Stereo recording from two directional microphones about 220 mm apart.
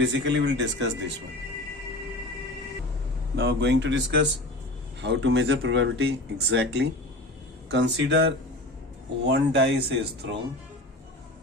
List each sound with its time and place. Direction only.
0.0 s speech: 55° right (ahead or behind)
3.3 s speech: 50° right (ahead or behind)